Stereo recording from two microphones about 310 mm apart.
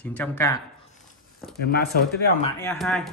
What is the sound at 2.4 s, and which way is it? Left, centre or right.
Speech, centre.